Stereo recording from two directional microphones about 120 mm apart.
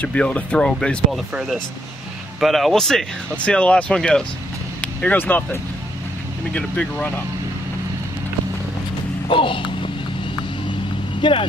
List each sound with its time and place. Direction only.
0.0 s speech: 10° left (ahead or behind)
9.3 s basketball bounce: 45° left (ahead or behind)
11.1 s speech: 45° left (ahead or behind)